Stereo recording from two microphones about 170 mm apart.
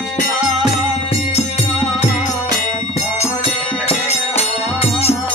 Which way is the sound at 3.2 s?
40° left (ahead or behind).